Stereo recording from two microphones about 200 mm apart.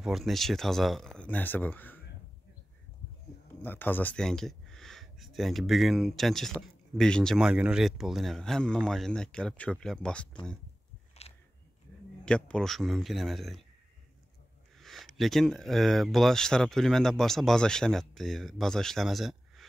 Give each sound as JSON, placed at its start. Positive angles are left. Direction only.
{"t": 0.0, "sound": "speech", "side_deg": 0}
{"t": 3.6, "sound": "speech", "side_deg": 10}
{"t": 11.2, "sound": "biting", "side_deg": 30}
{"t": 12.3, "sound": "speech", "side_deg": 5}
{"t": 14.8, "sound": "speech", "side_deg": 0}